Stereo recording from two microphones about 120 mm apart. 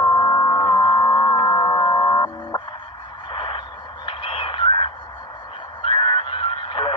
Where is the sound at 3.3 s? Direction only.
45° left (ahead or behind).